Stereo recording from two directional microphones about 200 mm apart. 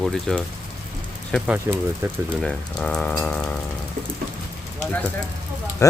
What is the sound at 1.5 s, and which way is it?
Speech, 10° right (ahead or behind).